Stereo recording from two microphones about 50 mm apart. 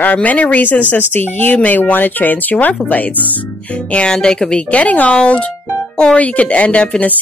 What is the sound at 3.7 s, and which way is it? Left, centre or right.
Speech, left.